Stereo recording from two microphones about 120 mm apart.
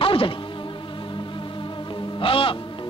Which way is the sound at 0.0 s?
50° left (ahead or behind).